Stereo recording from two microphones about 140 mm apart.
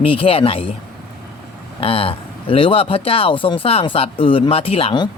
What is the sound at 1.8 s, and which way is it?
Speech, 45° left (ahead or behind).